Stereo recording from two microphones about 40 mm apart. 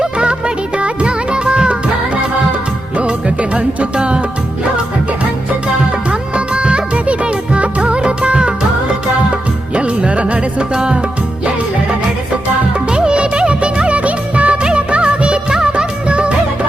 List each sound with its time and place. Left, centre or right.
0.0 s music: right
3.0 s music: right
6.1 s music: right
9.7 s music: right
12.9 s music of bollywood: right